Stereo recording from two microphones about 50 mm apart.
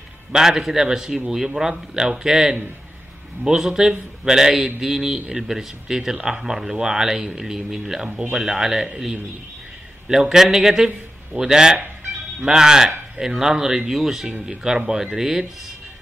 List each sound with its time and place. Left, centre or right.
0.3 s speech: centre